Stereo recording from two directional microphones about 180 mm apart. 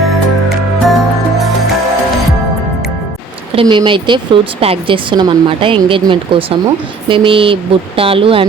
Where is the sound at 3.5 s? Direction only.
30° right (ahead or behind).